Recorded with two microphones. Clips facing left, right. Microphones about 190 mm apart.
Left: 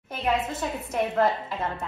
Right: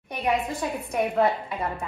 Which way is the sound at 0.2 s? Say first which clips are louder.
Right 1 dB; 5° left (ahead or behind).